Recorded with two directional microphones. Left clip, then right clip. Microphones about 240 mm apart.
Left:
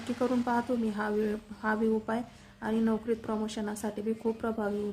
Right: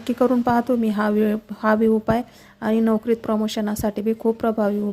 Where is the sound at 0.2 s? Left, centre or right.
Right.